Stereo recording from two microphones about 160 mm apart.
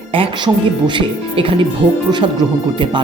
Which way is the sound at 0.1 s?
35° right (ahead or behind).